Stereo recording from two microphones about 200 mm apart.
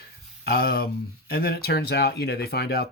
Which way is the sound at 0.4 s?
50° left (ahead or behind).